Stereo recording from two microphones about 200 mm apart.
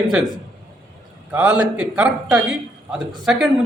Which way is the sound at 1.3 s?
5° right (ahead or behind).